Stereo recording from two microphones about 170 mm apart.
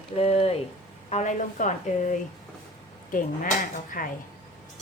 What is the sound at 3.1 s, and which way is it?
Speech, 55° left (ahead or behind).